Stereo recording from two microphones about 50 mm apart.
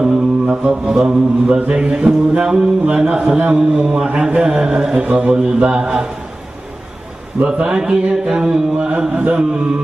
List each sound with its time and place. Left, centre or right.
0.7 s a man's voice: centre
1.7 s mantra: centre
5.0 s a man's voice: right
7.4 s a man's voice: centre
8.3 s mantra: centre
9.1 s a man's voice: right